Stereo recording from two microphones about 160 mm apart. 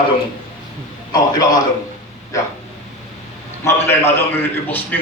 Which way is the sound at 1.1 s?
25° left (ahead or behind).